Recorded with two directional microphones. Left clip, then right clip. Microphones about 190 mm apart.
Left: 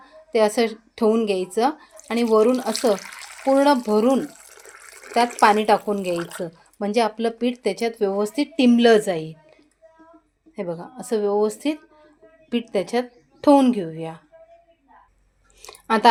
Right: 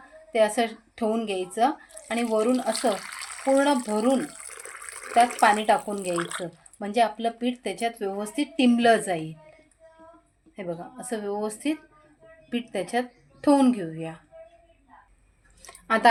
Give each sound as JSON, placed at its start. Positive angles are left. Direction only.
{"t": 0.3, "sound": "a woman's voice", "side_deg": 45}
{"t": 3.0, "sound": "a sound", "side_deg": -10}
{"t": 3.4, "sound": "speech", "side_deg": 45}
{"t": 4.3, "sound": "water", "side_deg": -5}
{"t": 5.4, "sound": "speech", "side_deg": 50}
{"t": 10.5, "sound": "speech", "side_deg": 40}
{"t": 15.6, "sound": "a sound", "side_deg": 45}